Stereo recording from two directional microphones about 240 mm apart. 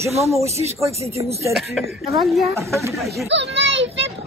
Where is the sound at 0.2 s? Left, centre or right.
Centre.